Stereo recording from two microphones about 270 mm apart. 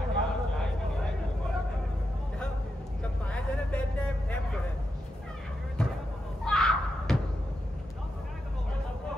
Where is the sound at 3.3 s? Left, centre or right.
Centre.